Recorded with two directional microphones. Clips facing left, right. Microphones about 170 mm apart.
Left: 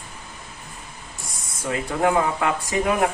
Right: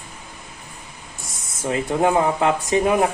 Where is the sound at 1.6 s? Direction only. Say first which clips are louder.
Right 3 dB; 25° right (ahead or behind).